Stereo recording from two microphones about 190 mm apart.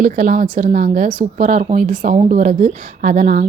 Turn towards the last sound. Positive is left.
turn(degrees=-40)  # may be behind; listen again after turning